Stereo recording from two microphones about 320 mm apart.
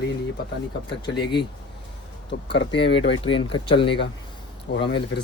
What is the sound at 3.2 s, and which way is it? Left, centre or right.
Speech, centre.